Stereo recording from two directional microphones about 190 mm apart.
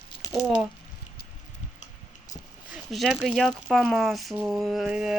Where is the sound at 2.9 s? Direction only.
Centre (ahead or behind).